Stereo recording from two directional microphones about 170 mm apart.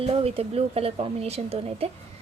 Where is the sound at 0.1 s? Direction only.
35° right (ahead or behind).